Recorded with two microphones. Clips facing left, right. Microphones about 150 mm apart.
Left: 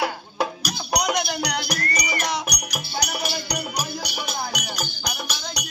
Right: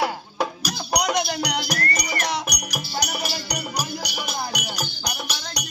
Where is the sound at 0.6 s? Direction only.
5° right (ahead or behind).